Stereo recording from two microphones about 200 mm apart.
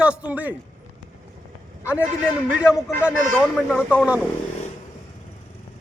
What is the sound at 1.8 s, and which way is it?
A man's voice, 5° right (ahead or behind).